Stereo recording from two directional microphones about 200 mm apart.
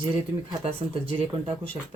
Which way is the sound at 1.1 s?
30° right (ahead or behind).